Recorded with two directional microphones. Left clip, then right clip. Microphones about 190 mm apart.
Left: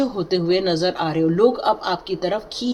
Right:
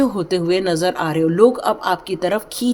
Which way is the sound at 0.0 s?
35° right (ahead or behind).